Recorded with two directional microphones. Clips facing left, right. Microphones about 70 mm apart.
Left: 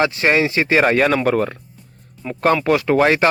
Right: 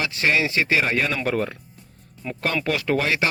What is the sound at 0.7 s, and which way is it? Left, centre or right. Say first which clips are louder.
Speech: left 8 dB; left.